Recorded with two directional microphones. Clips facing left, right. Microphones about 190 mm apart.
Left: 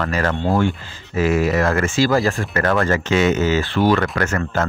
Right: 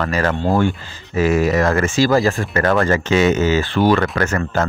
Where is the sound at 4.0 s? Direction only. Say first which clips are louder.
Right 2 dB; 30° right (ahead or behind).